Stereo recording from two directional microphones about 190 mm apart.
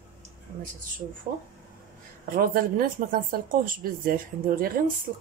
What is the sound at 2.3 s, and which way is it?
Speech, 50° right (ahead or behind).